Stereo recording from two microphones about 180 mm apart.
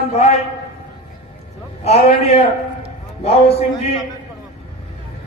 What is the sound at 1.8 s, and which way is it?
Speech, 35° left (ahead or behind).